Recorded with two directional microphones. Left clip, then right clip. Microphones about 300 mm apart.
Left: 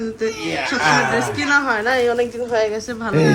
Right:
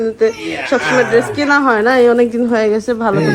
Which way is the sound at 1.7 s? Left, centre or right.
Centre.